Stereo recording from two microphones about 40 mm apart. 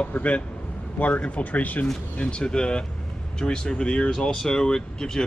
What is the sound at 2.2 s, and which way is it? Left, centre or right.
Speech, left.